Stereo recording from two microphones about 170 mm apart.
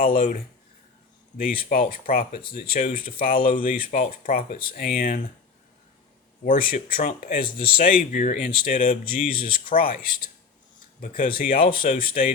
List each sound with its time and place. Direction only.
1.4 s speech: 55° left (ahead or behind)
6.4 s speech: 55° left (ahead or behind)
11.0 s speech: 55° left (ahead or behind)